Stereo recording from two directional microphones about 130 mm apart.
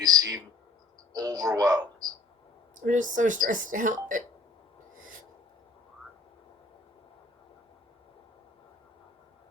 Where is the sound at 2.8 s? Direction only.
80° right.